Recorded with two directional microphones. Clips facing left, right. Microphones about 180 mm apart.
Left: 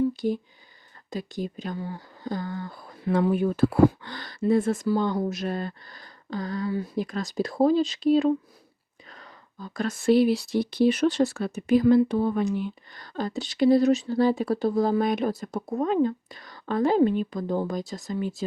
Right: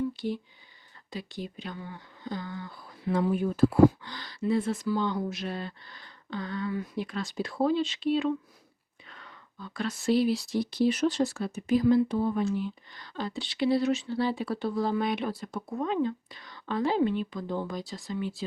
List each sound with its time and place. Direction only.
0.1 s a sound: 45° left (ahead or behind)
1.1 s speech: 45° left (ahead or behind); by 12.5 s 65° left (ahead or behind)
12.5 s speech: 55° left (ahead or behind)